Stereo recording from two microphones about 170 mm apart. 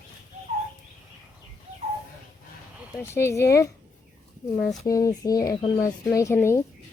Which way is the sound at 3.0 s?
15° left (ahead or behind).